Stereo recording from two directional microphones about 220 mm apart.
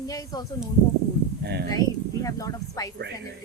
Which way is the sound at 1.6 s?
15° left (ahead or behind).